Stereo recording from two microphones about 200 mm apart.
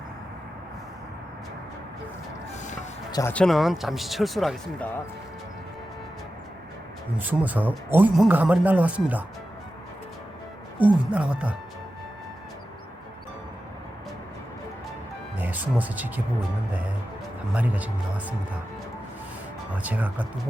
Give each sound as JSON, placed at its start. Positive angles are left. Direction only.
{"t": 3.1, "sound": "speech", "side_deg": 15}
{"t": 3.3, "sound": "speech", "side_deg": 0}
{"t": 7.2, "sound": "speech", "side_deg": -10}
{"t": 10.8, "sound": "speech", "side_deg": -5}
{"t": 15.4, "sound": "speech", "side_deg": -10}
{"t": 17.5, "sound": "speech", "side_deg": -5}
{"t": 19.7, "sound": "speech", "side_deg": -10}